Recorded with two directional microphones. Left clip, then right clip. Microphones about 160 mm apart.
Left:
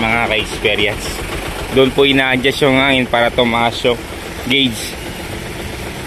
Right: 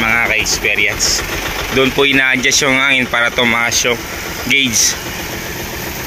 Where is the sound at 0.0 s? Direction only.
15° left (ahead or behind).